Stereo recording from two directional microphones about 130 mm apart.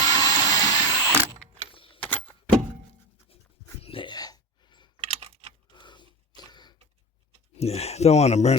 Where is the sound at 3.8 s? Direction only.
40° left (ahead or behind).